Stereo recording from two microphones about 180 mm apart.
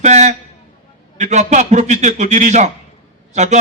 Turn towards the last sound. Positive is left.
turn(degrees=-40)  # may be behind; listen again after turning